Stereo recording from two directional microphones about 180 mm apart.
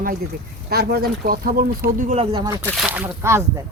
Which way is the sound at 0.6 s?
60° right (ahead or behind).